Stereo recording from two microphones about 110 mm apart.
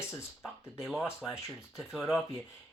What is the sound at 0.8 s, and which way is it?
Speech, centre (ahead or behind).